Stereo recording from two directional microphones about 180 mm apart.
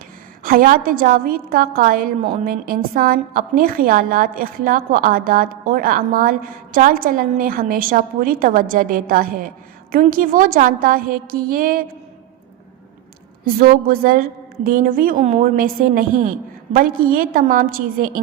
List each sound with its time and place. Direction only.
0.4 s a woman's voice: 50° right (ahead or behind)
13.4 s a woman's voice: 55° right (ahead or behind)